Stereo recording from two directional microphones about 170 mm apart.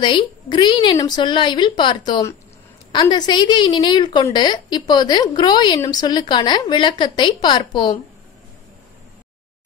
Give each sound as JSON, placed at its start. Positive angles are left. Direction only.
{"t": 0.0, "sound": "a woman's voice", "side_deg": 25}